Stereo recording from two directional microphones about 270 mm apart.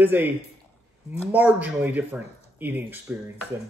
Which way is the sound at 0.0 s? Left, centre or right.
Centre.